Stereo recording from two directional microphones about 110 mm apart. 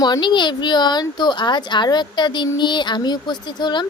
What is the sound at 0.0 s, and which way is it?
Speech, 40° left (ahead or behind).